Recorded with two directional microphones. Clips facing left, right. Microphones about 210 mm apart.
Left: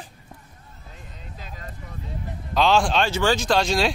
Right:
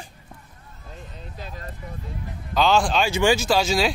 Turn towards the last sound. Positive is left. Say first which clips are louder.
# even
turn(degrees=0)  # may be behind; listen again after turning